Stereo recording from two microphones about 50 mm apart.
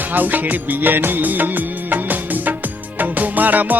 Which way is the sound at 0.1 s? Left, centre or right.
Right.